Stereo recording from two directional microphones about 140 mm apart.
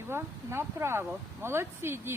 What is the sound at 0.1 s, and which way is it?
Speech, 15° right (ahead or behind).